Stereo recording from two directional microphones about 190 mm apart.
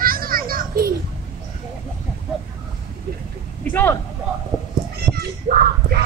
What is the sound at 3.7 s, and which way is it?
Vehicle, 10° left (ahead or behind).